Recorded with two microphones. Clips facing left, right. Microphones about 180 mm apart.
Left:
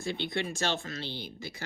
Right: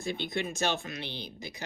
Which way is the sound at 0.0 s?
20° right (ahead or behind).